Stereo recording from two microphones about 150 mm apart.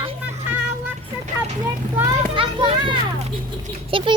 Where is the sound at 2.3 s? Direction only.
35° right (ahead or behind).